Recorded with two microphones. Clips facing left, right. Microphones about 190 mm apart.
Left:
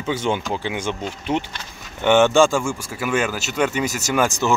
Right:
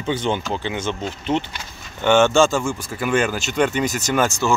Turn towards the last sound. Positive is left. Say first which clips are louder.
# even
turn(degrees=15)  # may be behind; listen again after turning